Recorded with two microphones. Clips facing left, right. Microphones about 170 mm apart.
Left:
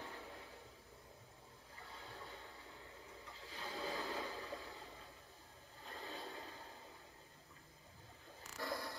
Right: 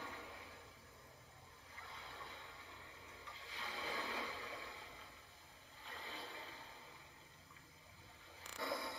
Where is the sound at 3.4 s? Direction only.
40° left (ahead or behind).